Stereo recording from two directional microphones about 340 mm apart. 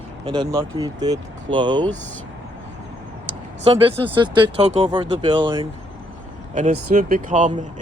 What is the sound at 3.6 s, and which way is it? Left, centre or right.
Speech, centre.